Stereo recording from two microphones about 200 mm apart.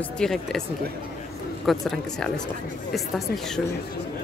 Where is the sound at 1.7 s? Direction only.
Centre (ahead or behind).